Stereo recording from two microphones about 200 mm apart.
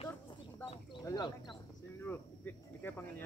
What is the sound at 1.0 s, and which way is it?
Speech, 20° left (ahead or behind).